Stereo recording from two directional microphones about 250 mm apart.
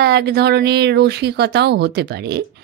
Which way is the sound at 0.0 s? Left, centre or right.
Right.